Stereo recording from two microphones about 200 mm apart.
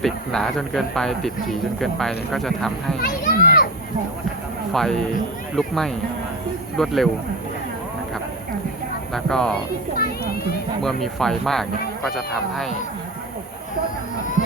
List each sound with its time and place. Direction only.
0.0 s speech: centre (ahead or behind)
3.0 s children playing: 50° left (ahead or behind)
4.7 s speech: centre (ahead or behind)
9.1 s speech: 5° left (ahead or behind)
10.8 s speech: centre (ahead or behind)